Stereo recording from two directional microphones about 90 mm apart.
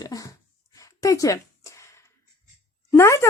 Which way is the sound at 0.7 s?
40° left (ahead or behind).